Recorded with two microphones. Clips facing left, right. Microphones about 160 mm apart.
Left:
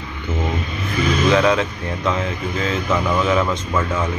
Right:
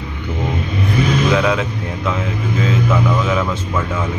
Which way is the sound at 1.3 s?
10° right (ahead or behind).